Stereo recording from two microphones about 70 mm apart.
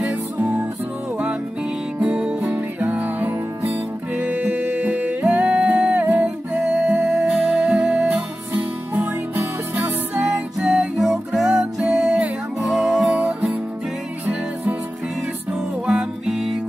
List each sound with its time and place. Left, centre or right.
0.0 s music: right
2.0 s music: centre
6.6 s music: centre
8.9 s music: right
10.1 s music: centre
14.2 s music: right
15.9 s music: centre